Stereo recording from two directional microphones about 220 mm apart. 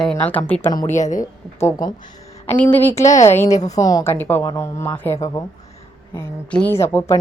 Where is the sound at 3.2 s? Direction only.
10° left (ahead or behind).